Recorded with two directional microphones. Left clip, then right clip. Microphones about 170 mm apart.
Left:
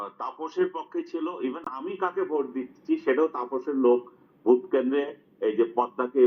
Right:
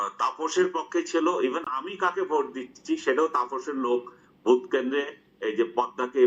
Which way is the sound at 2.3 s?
5° right (ahead or behind).